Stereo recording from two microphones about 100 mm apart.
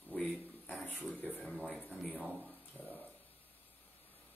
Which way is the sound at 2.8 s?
15° left (ahead or behind).